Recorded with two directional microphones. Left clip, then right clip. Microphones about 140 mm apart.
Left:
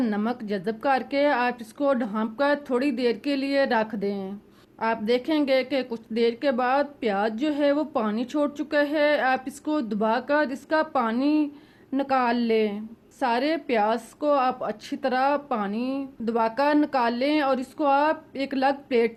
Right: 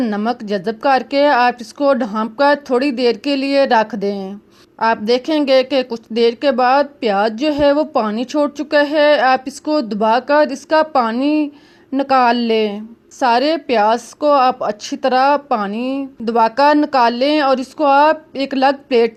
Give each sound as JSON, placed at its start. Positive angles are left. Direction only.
{"t": 0.0, "sound": "a woman's voice", "side_deg": -35}